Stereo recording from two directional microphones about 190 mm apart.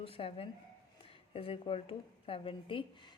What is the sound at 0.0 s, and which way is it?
A woman's voice, 30° left (ahead or behind).